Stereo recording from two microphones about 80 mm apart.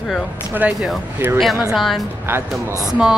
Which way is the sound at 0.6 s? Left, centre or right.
Centre.